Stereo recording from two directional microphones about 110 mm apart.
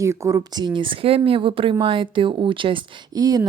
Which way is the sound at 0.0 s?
30° right (ahead or behind).